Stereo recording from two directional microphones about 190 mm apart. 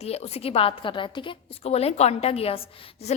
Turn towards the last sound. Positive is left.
turn(degrees=30)  # may be behind; listen again after turning